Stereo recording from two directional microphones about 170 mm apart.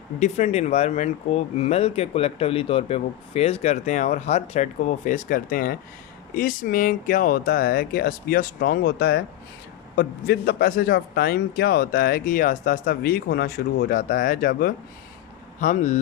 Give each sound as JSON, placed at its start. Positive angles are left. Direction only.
{"t": 0.2, "sound": "a man's voice", "side_deg": 40}
{"t": 15.6, "sound": "speech", "side_deg": 45}